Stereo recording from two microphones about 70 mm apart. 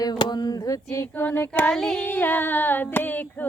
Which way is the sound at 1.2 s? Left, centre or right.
Left.